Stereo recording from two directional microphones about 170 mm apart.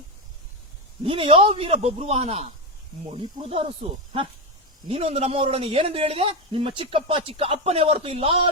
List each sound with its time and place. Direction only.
1.0 s a man's voice: 30° right (ahead or behind)
4.9 s a man's voice: 35° right (ahead or behind)